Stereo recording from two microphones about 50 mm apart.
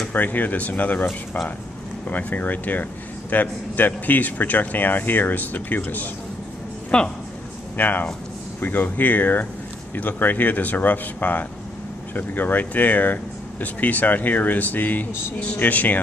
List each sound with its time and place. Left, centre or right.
0.1 s speech: left
2.0 s speech: left
6.9 s a woman's voice: centre
7.7 s speech: left